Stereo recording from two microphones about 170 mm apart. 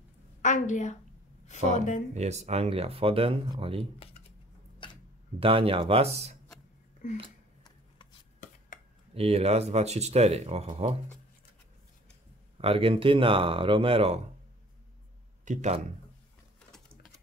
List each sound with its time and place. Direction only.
0.4 s a woman's voice: 45° left (ahead or behind)
2.1 s speech: 40° right (ahead or behind)
4.8 s a sound: 30° left (ahead or behind)
5.4 s speech: 35° right (ahead or behind)
9.1 s speech: 35° right (ahead or behind)
12.5 s speech: 35° right (ahead or behind)
15.4 s speech: 45° right (ahead or behind)